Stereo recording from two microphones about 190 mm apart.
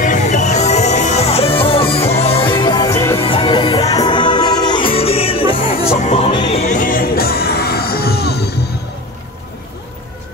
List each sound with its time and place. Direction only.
0.0 s music: 40° left (ahead or behind); by 3.2 s 15° left (ahead or behind)
3.2 s music: 30° left (ahead or behind); by 8.5 s 60° left (ahead or behind)